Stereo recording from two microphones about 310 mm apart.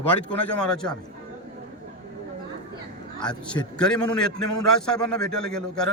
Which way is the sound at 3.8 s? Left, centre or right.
Centre.